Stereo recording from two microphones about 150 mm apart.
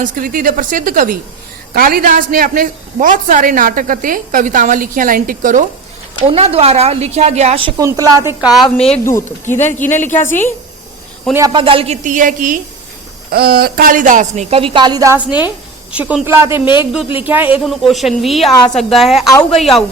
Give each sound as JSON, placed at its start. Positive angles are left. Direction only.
{"t": 0.0, "sound": "a woman's voice", "side_deg": -65}
{"t": 1.7, "sound": "a woman's voice", "side_deg": -80}
{"t": 6.3, "sound": "a woman's voice", "side_deg": -40}
{"t": 7.8, "sound": "a woman's voice", "side_deg": -25}
{"t": 8.6, "sound": "a woman's voice", "side_deg": 40}
{"t": 9.0, "sound": "a woman's voice", "side_deg": 15}
{"t": 11.5, "sound": "a woman's voice", "side_deg": -35}
{"t": 12.0, "sound": "a woman's voice", "side_deg": -60}
{"t": 13.3, "sound": "a woman's voice", "side_deg": -90}
{"t": 14.5, "sound": "a woman's voice", "side_deg": -35}
{"t": 15.3, "sound": "a woman's voice", "side_deg": 30}
{"t": 15.9, "sound": "speech", "side_deg": -10}
{"t": 17.6, "sound": "a woman's voice", "side_deg": 0}